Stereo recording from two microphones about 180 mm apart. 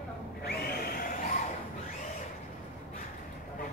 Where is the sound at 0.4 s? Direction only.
60° left (ahead or behind).